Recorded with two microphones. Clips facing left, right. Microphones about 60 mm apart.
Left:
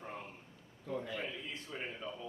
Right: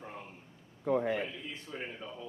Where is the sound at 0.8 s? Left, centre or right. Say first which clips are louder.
Right 10 dB; right.